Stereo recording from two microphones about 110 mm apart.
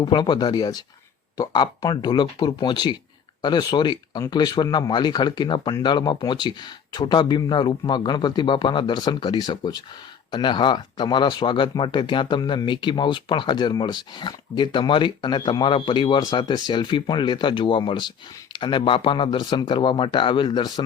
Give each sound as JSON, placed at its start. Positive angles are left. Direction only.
{"t": 0.0, "sound": "speech", "side_deg": 40}